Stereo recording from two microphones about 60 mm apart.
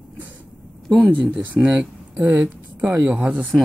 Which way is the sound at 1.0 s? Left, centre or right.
Right.